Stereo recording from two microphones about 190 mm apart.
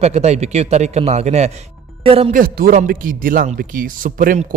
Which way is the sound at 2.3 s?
50° right (ahead or behind).